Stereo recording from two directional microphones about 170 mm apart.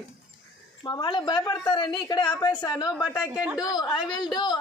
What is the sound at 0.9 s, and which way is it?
A woman's voice, 30° left (ahead or behind).